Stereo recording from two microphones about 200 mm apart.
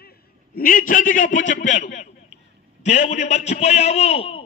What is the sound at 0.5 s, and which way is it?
A man's voice, 45° left (ahead or behind).